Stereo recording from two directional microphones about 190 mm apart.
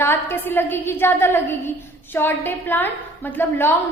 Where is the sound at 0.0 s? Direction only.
10° left (ahead or behind).